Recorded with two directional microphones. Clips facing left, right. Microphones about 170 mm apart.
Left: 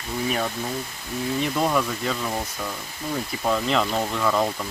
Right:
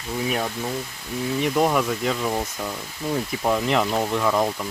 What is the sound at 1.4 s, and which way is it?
Speech, 15° right (ahead or behind).